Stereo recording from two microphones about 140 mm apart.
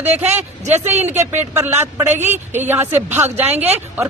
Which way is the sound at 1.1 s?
55° right (ahead or behind).